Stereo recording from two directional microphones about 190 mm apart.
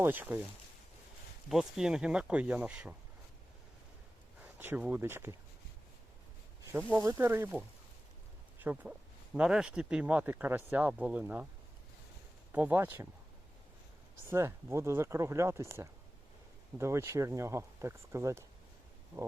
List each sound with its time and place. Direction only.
0.0 s speech: 10° right (ahead or behind)
1.5 s speech: centre (ahead or behind)
4.4 s speech: 10° right (ahead or behind)
6.9 s speech: 15° right (ahead or behind)
12.5 s speech: 10° right (ahead or behind)
14.3 s speech: 15° right (ahead or behind)
19.1 s a sound: 20° right (ahead or behind)